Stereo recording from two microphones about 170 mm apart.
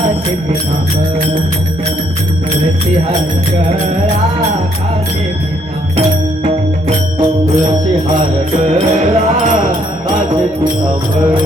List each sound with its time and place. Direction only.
6.4 s music: 45° right (ahead or behind)
8.5 s music: 40° right (ahead or behind)